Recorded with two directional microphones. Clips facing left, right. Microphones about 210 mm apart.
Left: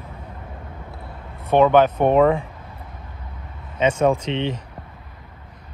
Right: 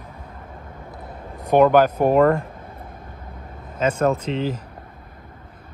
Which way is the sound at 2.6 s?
50° right (ahead or behind).